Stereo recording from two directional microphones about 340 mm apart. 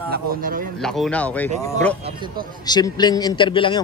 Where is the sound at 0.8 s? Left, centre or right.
Centre.